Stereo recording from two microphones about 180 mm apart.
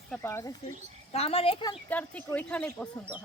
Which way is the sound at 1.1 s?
35° left (ahead or behind).